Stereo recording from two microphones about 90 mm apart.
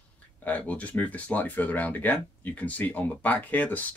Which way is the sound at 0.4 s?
15° left (ahead or behind).